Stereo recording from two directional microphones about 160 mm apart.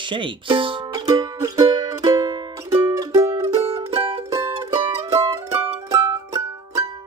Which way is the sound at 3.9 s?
30° right (ahead or behind).